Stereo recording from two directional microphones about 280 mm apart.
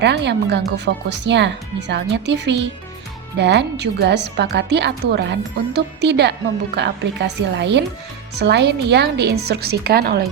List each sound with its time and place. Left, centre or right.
0.0 s a woman's voice: right